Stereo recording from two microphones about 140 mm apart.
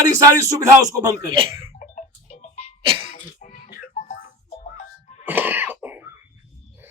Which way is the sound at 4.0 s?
65° left (ahead or behind).